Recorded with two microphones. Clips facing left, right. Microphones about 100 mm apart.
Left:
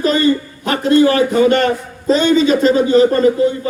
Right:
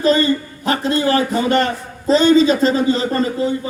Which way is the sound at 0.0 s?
35° right (ahead or behind).